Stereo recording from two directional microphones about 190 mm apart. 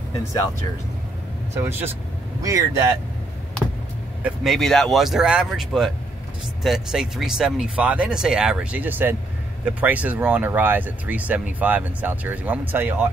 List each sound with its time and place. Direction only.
1.5 s speech: 15° right (ahead or behind)
4.2 s speech: centre (ahead or behind)